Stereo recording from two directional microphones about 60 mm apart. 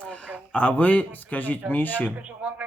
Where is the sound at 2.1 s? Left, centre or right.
Right.